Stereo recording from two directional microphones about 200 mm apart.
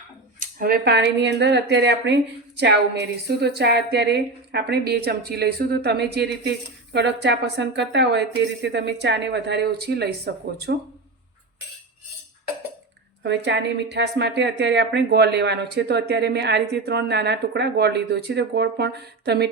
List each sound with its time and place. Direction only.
0.3 s speech: 50° right (ahead or behind)
13.2 s speech: 60° right (ahead or behind)